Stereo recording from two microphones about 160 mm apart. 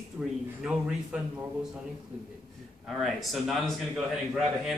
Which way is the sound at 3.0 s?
Centre (ahead or behind).